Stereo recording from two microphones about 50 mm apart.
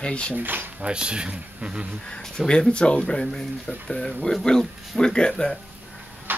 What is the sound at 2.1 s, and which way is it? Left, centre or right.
Speech, centre.